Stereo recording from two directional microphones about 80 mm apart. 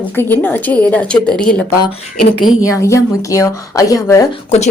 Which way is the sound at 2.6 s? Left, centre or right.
Left.